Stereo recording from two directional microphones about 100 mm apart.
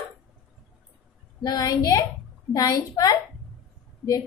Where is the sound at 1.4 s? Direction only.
40° left (ahead or behind).